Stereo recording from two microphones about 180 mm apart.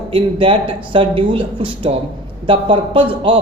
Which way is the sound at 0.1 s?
30° right (ahead or behind).